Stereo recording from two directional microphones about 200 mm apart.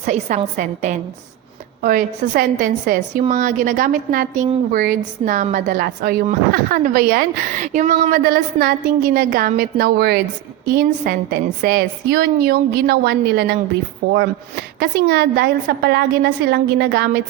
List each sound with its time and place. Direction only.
0.0 s a woman's voice: 35° right (ahead or behind); by 13.6 s 55° right (ahead or behind)
14.0 s speech: 65° right (ahead or behind)
14.8 s a woman's voice: 55° right (ahead or behind)